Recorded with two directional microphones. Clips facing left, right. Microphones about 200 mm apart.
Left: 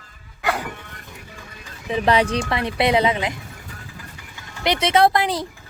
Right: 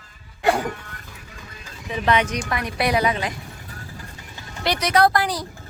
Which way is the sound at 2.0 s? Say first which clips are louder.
Left 2 dB; 35° left (ahead or behind).